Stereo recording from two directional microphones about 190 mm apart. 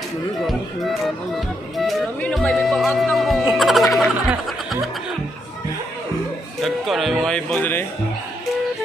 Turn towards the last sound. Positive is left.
turn(degrees=10)  # may be behind; listen again after turning